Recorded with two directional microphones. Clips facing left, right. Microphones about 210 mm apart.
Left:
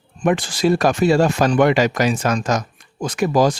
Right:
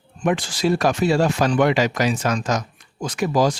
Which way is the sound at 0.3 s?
50° left (ahead or behind).